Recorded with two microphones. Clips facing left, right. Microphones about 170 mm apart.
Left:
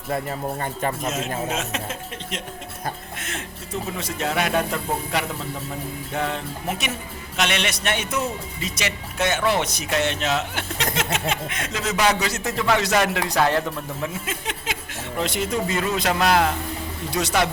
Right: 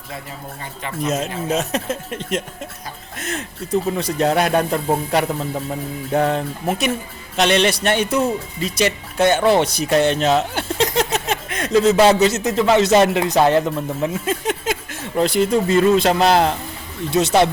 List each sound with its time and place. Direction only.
0.1 s speech: 50° left (ahead or behind)
1.0 s speech: 40° right (ahead or behind); by 14.1 s 20° right (ahead or behind)
14.3 s a sound: 45° right (ahead or behind)
15.2 s speech: 35° right (ahead or behind)